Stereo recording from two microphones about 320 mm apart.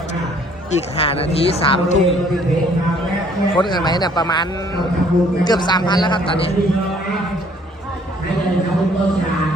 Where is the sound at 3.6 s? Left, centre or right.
Centre.